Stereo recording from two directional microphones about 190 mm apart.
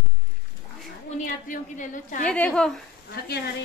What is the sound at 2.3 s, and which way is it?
Speech, 5° left (ahead or behind).